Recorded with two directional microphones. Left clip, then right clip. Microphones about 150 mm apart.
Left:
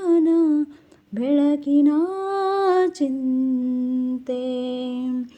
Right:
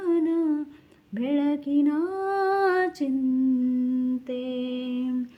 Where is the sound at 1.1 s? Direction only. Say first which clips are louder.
Left 6 dB; 35° left (ahead or behind).